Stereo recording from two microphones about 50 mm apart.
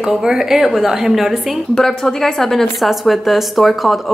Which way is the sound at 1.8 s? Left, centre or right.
Centre.